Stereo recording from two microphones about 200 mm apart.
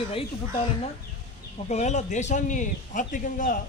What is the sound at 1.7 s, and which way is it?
A man's voice, 35° left (ahead or behind).